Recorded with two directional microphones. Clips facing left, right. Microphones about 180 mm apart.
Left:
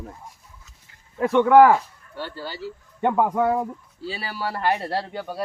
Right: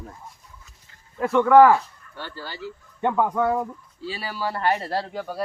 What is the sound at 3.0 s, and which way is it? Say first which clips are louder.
Speech: left 1 dB; 10° left (ahead or behind).